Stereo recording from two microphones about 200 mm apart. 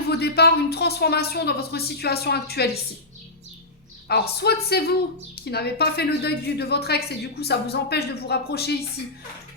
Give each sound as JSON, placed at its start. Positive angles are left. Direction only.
{"t": 0.1, "sound": "a woman's voice", "side_deg": 55}
{"t": 4.1, "sound": "a woman's voice", "side_deg": 55}